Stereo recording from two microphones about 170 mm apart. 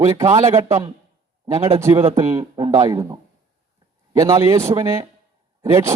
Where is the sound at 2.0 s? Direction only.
20° right (ahead or behind).